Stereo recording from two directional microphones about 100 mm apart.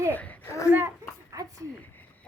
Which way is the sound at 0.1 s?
15° left (ahead or behind).